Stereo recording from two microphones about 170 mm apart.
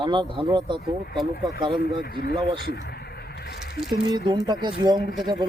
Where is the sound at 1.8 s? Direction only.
65° left (ahead or behind).